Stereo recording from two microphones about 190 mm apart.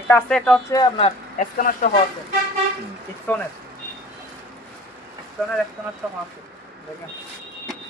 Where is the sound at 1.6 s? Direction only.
45° left (ahead or behind).